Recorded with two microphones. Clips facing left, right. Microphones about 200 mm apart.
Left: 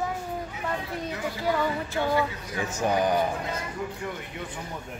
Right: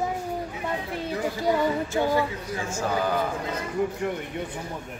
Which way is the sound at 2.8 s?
15° left (ahead or behind).